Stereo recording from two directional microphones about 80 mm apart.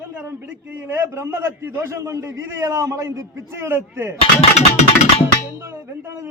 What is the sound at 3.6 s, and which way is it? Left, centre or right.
Speech, right.